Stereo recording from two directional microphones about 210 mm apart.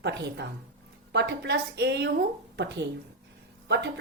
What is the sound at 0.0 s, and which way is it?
A woman's voice, 55° right (ahead or behind).